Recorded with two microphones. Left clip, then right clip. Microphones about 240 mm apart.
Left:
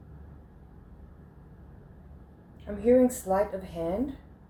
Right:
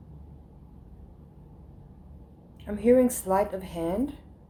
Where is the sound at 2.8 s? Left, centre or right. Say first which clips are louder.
Right 1 dB; right.